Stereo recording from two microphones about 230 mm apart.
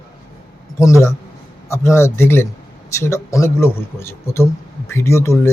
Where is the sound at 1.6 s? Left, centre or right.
Centre.